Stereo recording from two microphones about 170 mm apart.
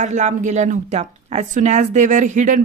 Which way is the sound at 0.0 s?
45° right (ahead or behind).